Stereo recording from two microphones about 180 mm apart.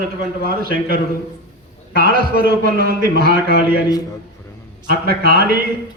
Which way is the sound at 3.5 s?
60° left (ahead or behind).